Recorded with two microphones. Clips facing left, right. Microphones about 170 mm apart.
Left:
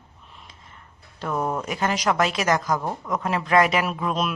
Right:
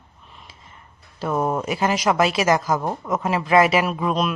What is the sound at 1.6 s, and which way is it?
A woman's voice, 10° right (ahead or behind).